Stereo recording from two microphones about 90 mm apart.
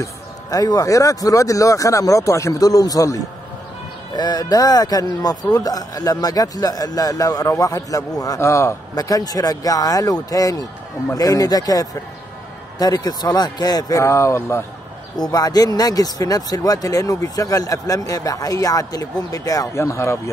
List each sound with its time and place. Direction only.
0.0 s speech: 45° left (ahead or behind)
8.9 s speech: 45° left (ahead or behind)
15.1 s speech: 50° left (ahead or behind); by 20.2 s 30° left (ahead or behind)